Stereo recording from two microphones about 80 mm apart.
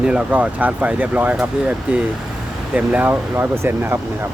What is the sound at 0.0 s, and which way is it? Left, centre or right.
Speech, centre.